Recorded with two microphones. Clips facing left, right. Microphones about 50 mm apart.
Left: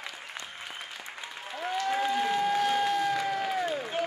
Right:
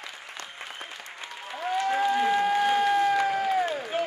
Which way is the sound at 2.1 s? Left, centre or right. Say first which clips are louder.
Right 3 dB; centre.